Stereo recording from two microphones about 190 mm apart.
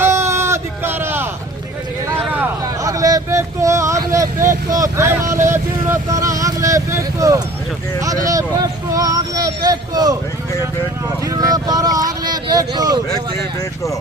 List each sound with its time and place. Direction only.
0.0 s a sound: 15° right (ahead or behind)
5.5 s vehicle: 15° right (ahead or behind)
8.0 s speech: 20° right (ahead or behind)
11.3 s speech: 20° right (ahead or behind)